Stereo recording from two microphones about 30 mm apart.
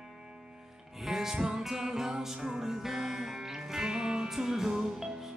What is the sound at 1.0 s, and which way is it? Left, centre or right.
Music, centre.